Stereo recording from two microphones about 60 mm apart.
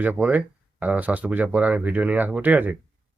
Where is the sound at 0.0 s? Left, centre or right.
Right.